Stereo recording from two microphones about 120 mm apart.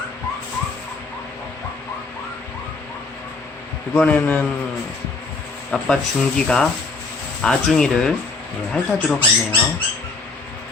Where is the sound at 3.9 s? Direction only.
10° left (ahead or behind).